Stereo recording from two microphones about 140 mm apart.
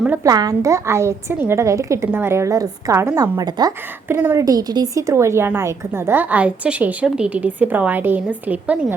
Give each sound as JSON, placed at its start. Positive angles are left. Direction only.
{"t": 0.2, "sound": "a woman's voice", "side_deg": -25}
{"t": 4.1, "sound": "speech", "side_deg": -15}